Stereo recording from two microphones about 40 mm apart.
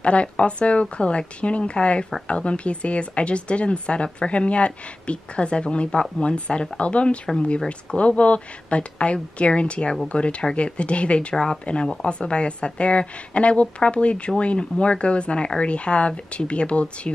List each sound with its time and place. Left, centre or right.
0.0 s a woman's voice: left